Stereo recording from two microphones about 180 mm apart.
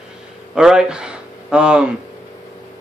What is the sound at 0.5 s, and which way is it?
Speech, 5° right (ahead or behind).